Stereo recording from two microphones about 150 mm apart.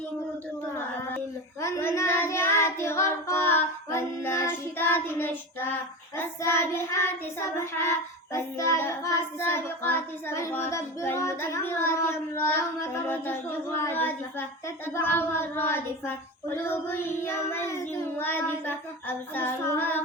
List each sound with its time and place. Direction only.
1.6 s child singing: 20° left (ahead or behind)